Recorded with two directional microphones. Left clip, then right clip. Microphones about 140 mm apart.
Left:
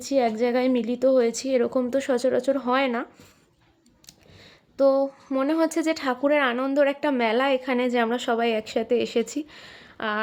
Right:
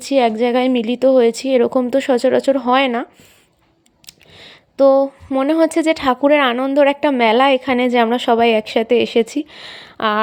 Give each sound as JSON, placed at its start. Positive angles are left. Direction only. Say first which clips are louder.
{"t": 0.0, "sound": "a woman's voice", "louder": "right 8 dB", "side_deg": -35}